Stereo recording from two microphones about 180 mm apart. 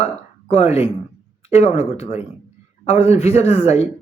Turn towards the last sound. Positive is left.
turn(degrees=35)  # may be behind; listen again after turning